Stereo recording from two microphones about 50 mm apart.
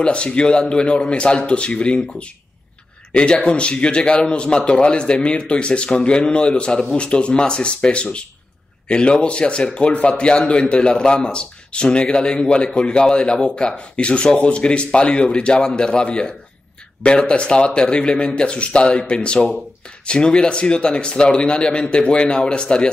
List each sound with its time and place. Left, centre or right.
0.0 s speech: left